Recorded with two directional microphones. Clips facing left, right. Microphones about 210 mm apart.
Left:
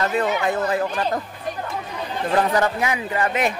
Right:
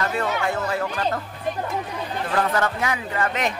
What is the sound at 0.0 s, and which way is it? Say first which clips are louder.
Speech: left 3 dB; 20° left (ahead or behind).